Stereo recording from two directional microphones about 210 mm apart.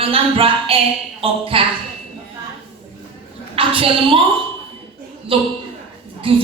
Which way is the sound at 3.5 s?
25° right (ahead or behind).